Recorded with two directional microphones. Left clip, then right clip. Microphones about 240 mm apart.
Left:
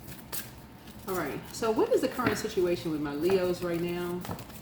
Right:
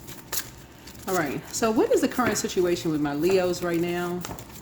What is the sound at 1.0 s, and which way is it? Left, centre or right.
Speech, right.